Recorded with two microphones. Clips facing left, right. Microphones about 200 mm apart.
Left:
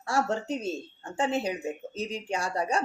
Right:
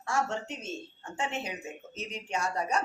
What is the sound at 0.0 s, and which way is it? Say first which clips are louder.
Speech: left 3 dB; 35° left (ahead or behind).